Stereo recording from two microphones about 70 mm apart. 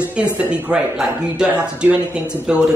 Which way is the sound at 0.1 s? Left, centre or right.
Centre.